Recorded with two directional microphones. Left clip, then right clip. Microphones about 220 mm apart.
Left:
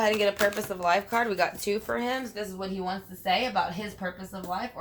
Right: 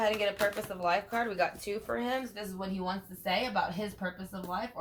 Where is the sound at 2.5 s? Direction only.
10° left (ahead or behind).